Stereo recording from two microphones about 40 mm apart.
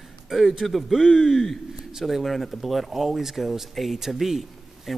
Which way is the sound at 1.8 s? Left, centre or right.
Centre.